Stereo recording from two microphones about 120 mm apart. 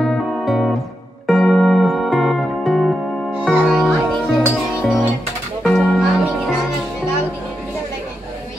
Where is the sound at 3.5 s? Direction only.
10° right (ahead or behind).